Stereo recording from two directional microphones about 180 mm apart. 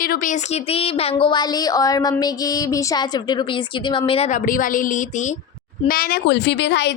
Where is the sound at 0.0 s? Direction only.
55° left (ahead or behind).